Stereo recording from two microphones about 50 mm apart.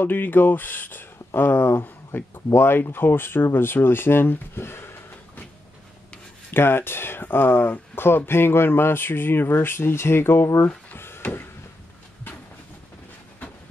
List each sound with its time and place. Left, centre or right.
0.0 s speech: left
6.5 s speech: left
11.0 s a sound: left